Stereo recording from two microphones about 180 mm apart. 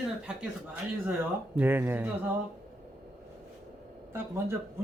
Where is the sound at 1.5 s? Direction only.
10° right (ahead or behind).